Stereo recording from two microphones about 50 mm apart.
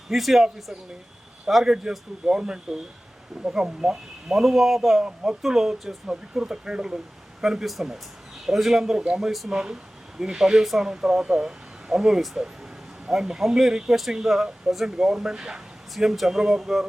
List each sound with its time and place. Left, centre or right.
0.1 s speech: centre
1.5 s speech: centre
5.0 s speech: centre
5.4 s speech: centre
7.4 s speech: centre
9.5 s speech: centre